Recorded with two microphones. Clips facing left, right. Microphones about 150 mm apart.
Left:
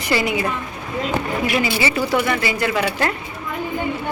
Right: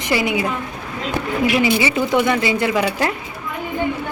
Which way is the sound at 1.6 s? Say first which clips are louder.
Right 3 dB; 20° right (ahead or behind).